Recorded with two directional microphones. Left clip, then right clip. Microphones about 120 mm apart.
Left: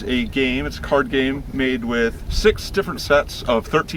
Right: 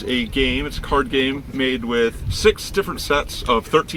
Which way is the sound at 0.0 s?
30° left (ahead or behind).